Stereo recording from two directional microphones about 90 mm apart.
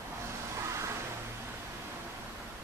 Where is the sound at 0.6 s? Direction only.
35° right (ahead or behind).